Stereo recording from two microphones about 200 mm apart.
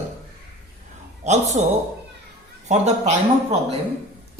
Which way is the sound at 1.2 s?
35° right (ahead or behind).